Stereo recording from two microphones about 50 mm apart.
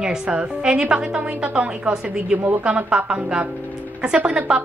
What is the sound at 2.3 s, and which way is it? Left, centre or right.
Speech, right.